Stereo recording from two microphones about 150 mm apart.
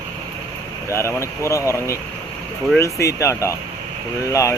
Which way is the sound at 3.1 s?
20° left (ahead or behind).